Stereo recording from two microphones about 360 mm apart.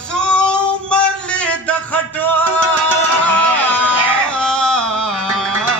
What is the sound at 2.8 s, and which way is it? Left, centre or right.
Music, centre.